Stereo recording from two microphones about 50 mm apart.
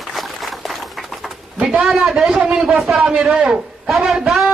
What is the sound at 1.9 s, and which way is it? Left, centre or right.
A man's voice, centre.